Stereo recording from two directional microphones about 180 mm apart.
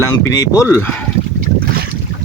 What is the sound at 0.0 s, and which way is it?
Speech, 20° left (ahead or behind).